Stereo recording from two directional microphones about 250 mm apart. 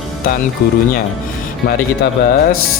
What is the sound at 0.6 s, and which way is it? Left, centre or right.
Speech, left.